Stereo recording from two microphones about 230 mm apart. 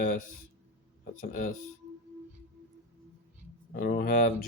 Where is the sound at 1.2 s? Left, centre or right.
Left.